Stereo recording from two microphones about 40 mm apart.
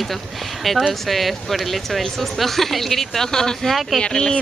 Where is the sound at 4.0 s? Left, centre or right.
Centre.